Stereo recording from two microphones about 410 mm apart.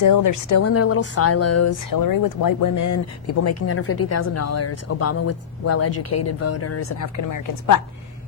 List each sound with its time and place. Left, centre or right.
0.0 s speech: left
1.9 s speech: left
3.4 s speech: left